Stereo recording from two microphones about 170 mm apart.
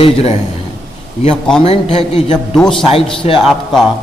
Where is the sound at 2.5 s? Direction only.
5° left (ahead or behind).